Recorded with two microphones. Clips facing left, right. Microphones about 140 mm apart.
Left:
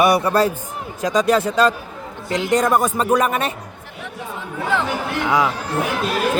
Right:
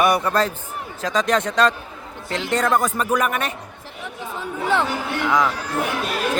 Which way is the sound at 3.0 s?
30° left (ahead or behind).